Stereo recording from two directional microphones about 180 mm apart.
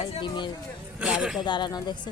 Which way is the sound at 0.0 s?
25° left (ahead or behind).